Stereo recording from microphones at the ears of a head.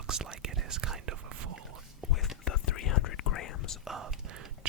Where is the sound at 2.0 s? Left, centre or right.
Left.